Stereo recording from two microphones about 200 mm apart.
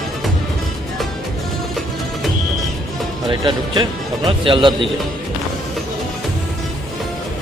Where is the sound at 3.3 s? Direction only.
25° right (ahead or behind).